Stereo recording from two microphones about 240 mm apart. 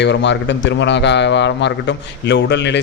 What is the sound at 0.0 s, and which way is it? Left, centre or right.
Speech, left.